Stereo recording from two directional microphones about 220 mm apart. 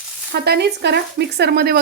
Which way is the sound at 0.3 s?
50° right (ahead or behind).